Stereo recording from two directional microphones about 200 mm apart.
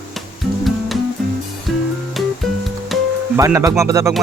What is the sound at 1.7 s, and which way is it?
Music, centre (ahead or behind).